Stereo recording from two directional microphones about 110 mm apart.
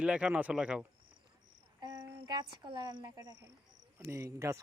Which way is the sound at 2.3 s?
40° right (ahead or behind).